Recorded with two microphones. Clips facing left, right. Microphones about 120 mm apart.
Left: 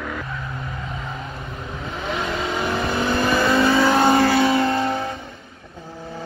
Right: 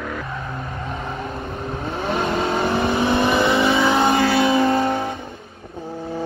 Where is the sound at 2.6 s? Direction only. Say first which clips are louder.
Right 1 dB; 25° right (ahead or behind).